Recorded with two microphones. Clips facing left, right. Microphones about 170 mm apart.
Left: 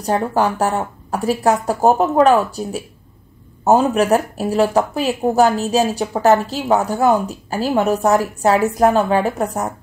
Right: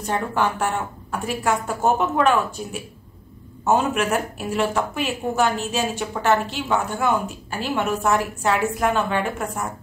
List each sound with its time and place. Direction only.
0.0 s speech: 35° left (ahead or behind)